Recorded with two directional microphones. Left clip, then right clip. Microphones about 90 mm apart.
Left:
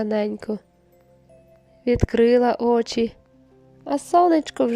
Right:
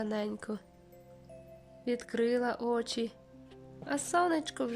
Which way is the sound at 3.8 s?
75° left (ahead or behind).